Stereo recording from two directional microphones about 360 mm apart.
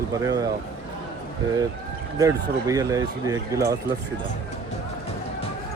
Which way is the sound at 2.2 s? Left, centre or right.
Centre.